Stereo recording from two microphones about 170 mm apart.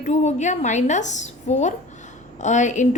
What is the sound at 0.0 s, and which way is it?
Speech, 40° left (ahead or behind).